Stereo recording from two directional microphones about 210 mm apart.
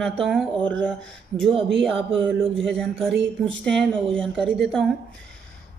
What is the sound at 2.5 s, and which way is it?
Speech, centre (ahead or behind).